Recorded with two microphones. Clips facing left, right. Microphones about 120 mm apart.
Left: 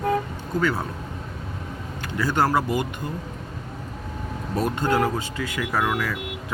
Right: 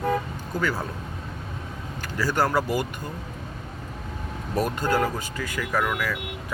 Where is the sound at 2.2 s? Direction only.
25° left (ahead or behind).